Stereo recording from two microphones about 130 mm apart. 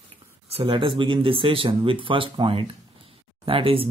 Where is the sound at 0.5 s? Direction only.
45° right (ahead or behind).